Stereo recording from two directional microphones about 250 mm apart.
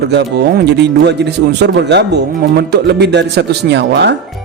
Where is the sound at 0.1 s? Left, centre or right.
Right.